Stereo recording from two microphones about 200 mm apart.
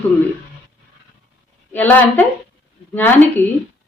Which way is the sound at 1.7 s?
10° left (ahead or behind).